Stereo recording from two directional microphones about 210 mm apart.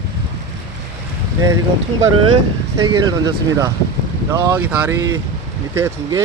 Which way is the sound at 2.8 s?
20° right (ahead or behind).